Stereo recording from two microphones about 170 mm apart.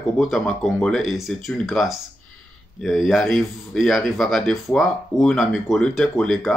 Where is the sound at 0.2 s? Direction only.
Centre (ahead or behind).